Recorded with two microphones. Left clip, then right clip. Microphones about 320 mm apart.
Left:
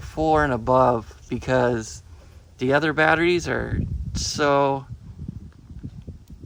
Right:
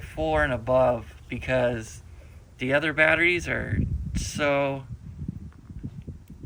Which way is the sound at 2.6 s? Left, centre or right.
Centre.